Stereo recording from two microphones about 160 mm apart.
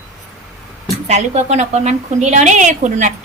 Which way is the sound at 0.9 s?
45° right (ahead or behind).